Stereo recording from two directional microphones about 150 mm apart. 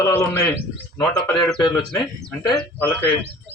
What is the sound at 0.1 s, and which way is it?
A man's voice, 15° left (ahead or behind).